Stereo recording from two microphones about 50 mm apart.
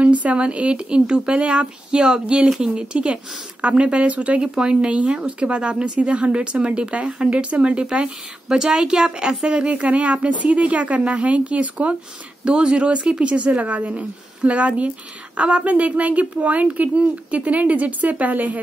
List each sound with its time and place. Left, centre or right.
0.0 s speech: right
8.5 s speech: centre; by 18.6 s right